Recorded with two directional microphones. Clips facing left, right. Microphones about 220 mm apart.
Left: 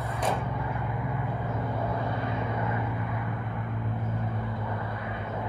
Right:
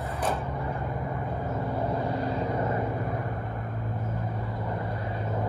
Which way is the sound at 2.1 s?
35° right (ahead or behind).